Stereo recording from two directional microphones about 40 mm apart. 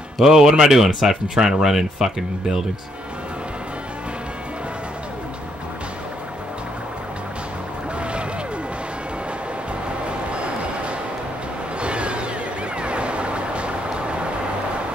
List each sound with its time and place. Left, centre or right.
0.2 s speech: centre
8.0 s music: right
10.0 s music: right
11.8 s a sound: right
12.7 s vehicle: right